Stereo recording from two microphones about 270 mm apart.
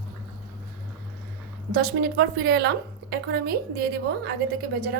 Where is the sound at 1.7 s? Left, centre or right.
Right.